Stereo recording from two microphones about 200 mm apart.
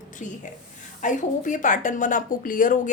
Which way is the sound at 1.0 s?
40° left (ahead or behind).